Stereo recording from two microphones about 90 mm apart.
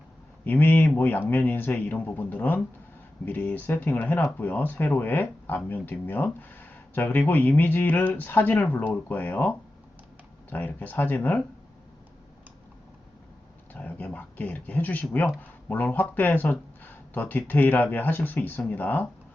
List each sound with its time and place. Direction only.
0.4 s speech: 20° left (ahead or behind)
13.7 s speech: 20° left (ahead or behind)